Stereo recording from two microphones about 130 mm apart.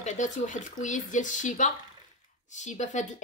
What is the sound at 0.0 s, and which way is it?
Speech, 70° left (ahead or behind).